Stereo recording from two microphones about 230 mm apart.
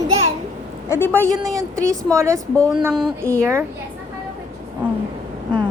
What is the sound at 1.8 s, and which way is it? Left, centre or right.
Speech, centre.